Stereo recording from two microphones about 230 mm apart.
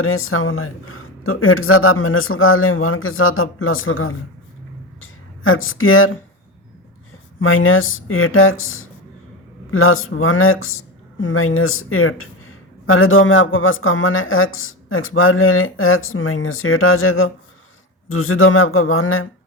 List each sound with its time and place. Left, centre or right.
0.0 s speech: left
4.9 s a sound: left
7.3 s speech: left